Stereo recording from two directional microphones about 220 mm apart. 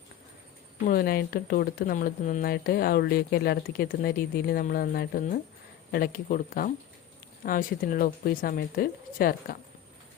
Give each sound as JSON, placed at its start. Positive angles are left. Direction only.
{"t": 0.9, "sound": "speech", "side_deg": 40}